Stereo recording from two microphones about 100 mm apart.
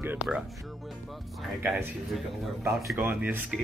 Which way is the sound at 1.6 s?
20° right (ahead or behind).